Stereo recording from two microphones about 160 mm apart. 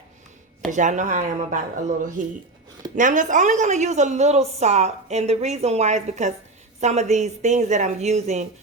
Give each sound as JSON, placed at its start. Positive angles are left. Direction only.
{"t": 0.7, "sound": "a woman's voice", "side_deg": -50}
{"t": 2.9, "sound": "a woman's voice", "side_deg": -55}